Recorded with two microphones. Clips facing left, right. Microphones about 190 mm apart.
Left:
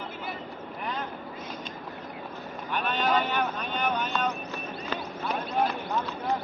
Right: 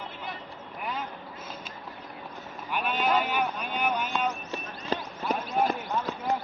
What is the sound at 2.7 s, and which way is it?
Speech, 10° right (ahead or behind).